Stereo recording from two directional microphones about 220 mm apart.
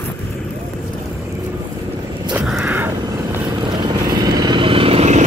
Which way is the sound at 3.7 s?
20° right (ahead or behind).